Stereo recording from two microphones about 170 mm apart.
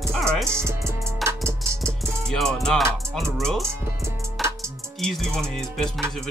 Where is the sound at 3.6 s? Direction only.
15° right (ahead or behind).